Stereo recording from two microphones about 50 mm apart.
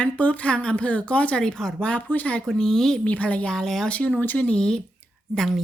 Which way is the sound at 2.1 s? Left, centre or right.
Left.